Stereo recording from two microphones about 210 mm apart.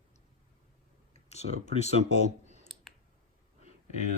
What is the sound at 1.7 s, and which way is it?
Speech, 30° left (ahead or behind).